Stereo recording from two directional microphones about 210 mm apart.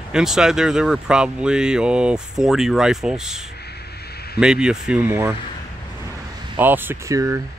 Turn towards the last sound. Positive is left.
turn(degrees=-15)  # may be behind; listen again after turning